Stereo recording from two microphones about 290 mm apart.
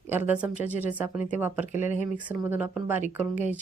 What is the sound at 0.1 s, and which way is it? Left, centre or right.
A woman's voice, centre.